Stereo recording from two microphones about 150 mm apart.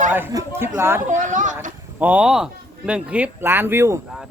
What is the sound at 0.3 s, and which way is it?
Speech, 20° right (ahead or behind).